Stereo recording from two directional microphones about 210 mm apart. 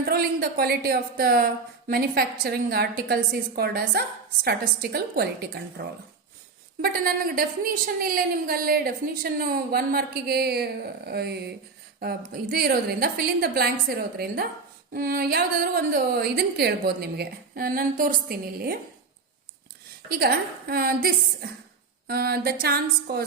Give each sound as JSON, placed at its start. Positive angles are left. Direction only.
{"t": 0.0, "sound": "speech", "side_deg": -45}
{"t": 6.8, "sound": "speech", "side_deg": -45}
{"t": 20.1, "sound": "speech", "side_deg": -45}